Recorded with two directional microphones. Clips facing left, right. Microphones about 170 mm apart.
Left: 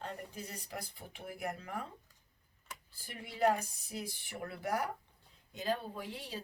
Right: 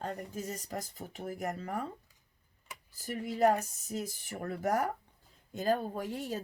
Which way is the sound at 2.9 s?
40° right (ahead or behind).